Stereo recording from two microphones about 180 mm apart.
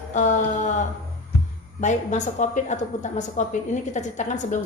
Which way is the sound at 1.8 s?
40° left (ahead or behind).